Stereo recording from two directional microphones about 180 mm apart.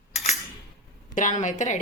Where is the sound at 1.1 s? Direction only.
45° left (ahead or behind).